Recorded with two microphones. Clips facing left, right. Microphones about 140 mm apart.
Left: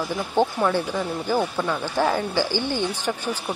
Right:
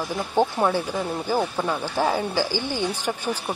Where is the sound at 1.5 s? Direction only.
20° right (ahead or behind).